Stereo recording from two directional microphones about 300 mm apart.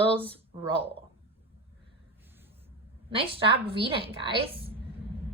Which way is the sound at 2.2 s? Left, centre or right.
Centre.